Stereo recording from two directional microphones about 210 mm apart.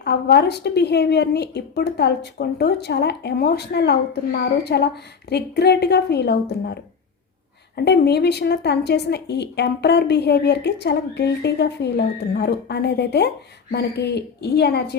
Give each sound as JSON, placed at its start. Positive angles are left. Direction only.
{"t": 0.0, "sound": "a woman's voice", "side_deg": 50}
{"t": 7.8, "sound": "a woman's voice", "side_deg": 50}